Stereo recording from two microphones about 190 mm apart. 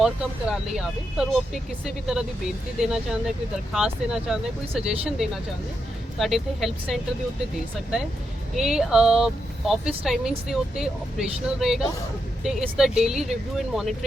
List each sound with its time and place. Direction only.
0.0 s speech: 5° right (ahead or behind)
2.8 s speech: 5° right (ahead or behind)
8.5 s speech: centre (ahead or behind)